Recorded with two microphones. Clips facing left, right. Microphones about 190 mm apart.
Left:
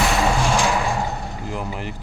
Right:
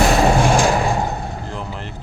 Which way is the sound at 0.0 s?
45° right (ahead or behind).